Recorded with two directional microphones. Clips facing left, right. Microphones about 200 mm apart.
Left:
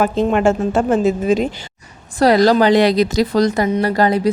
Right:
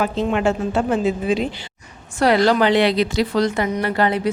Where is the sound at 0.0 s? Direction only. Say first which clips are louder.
Left 4 dB; 45° left (ahead or behind).